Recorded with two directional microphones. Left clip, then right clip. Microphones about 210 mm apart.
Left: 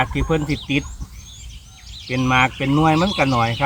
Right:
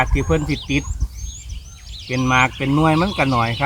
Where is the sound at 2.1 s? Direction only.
Centre (ahead or behind).